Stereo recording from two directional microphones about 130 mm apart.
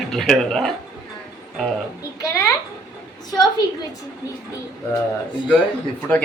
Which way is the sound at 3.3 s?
30° left (ahead or behind).